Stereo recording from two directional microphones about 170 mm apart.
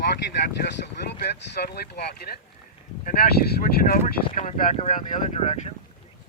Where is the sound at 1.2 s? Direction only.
70° left (ahead or behind); by 4.4 s 55° left (ahead or behind).